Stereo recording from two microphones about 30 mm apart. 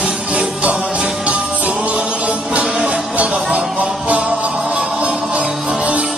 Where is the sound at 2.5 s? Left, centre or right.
Right.